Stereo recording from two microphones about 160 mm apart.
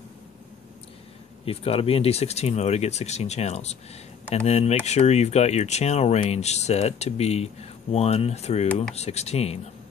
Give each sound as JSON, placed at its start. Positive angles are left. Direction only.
{"t": 1.4, "sound": "speech", "side_deg": 35}